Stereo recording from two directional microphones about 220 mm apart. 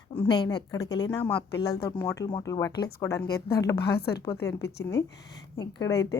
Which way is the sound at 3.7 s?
45° left (ahead or behind).